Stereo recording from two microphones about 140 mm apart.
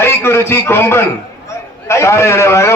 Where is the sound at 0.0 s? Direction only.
15° left (ahead or behind).